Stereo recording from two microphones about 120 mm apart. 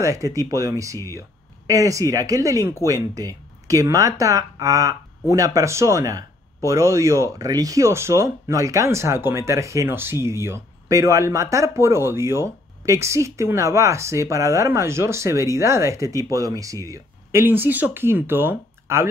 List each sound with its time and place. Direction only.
0.0 s speech: 25° right (ahead or behind)